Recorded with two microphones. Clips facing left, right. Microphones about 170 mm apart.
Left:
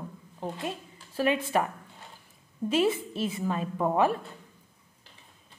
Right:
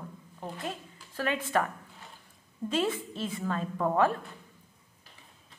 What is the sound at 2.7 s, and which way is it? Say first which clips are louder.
A woman's voice: left 4 dB; 10° left (ahead or behind).